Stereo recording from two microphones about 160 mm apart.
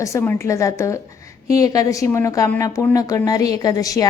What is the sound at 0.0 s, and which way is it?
A woman's voice, 15° left (ahead or behind).